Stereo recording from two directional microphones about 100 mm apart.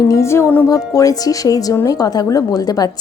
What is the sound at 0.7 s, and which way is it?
Speech, 35° left (ahead or behind).